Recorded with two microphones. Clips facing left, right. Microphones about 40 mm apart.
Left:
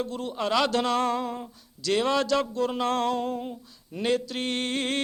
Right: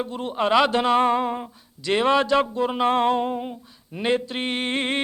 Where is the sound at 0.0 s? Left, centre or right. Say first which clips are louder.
Right 5 dB; right.